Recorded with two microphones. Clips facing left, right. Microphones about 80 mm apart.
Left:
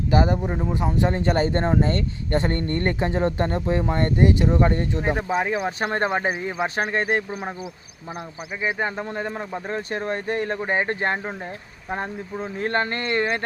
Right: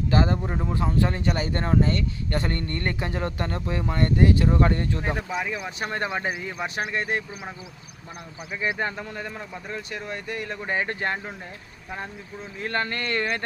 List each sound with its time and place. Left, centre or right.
0.1 s speech: centre
1.2 s a man's voice: left
5.3 s a man's voice: left
8.6 s a man's voice: left